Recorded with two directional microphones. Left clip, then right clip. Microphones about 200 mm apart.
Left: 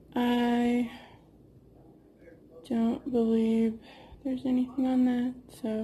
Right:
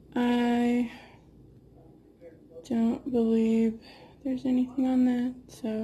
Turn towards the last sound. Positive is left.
turn(degrees=-5)  # may be behind; listen again after turning